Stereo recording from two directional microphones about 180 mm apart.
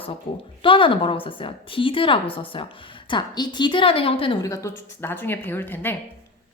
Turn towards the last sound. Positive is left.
turn(degrees=10)  # may be behind; listen again after turning